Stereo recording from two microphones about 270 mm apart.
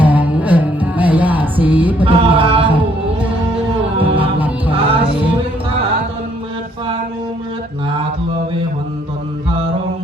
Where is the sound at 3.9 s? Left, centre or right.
Centre.